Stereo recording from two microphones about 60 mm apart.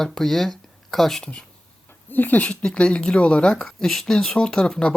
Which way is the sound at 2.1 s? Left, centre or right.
Left.